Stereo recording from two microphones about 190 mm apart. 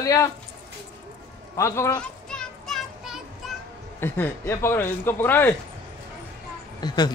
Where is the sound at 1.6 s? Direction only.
15° left (ahead or behind).